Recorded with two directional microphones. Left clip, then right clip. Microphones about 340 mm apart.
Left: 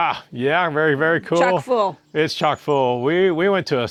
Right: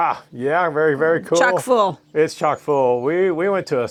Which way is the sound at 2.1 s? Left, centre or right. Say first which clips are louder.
Right 1 dB; left.